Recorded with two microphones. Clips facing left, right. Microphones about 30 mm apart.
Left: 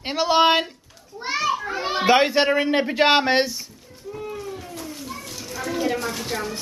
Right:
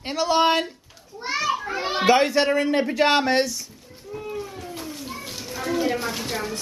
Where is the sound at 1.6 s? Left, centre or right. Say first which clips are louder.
Left 1 dB; centre.